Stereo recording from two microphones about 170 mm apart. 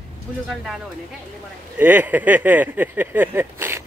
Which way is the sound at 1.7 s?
10° right (ahead or behind).